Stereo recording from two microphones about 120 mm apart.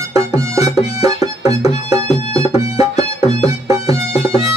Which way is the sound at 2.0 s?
60° left (ahead or behind).